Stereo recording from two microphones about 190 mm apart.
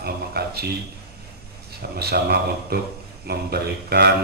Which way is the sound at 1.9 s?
55° right (ahead or behind).